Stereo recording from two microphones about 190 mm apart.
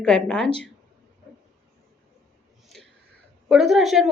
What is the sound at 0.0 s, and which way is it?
Speech, 5° left (ahead or behind).